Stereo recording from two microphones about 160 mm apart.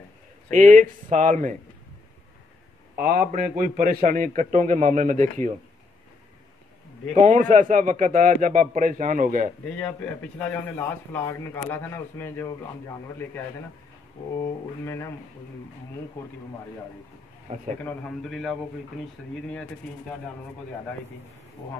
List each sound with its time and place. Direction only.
0.5 s a man's voice: 50° right (ahead or behind)
3.0 s a man's voice: 65° right (ahead or behind); by 5.5 s 50° right (ahead or behind)
7.2 s a man's voice: 50° right (ahead or behind)
9.7 s a man's voice: 10° left (ahead or behind)
14.4 s speech: 20° left (ahead or behind)
17.8 s a man's voice: 5° left (ahead or behind)